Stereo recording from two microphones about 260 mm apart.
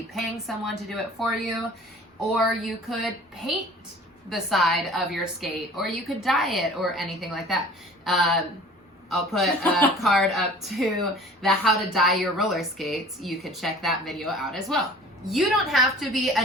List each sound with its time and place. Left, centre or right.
0.1 s a woman's voice: centre